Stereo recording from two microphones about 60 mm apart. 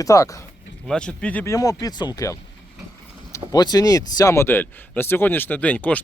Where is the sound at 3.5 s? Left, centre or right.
Left.